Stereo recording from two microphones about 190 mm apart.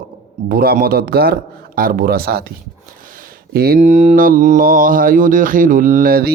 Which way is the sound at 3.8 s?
40° right (ahead or behind).